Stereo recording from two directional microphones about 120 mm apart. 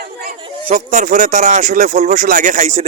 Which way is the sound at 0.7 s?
90° right.